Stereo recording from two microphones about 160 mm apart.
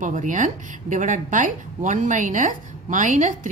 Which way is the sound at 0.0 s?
55° right (ahead or behind).